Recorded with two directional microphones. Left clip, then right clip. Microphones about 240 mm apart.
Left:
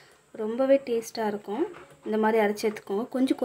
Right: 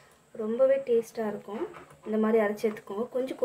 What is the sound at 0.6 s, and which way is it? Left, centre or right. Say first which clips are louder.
Speech: even; left.